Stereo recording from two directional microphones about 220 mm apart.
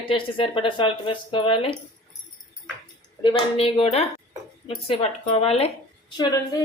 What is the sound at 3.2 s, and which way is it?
Speech, 20° left (ahead or behind).